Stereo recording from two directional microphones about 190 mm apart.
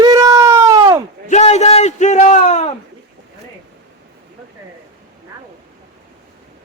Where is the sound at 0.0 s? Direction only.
20° right (ahead or behind).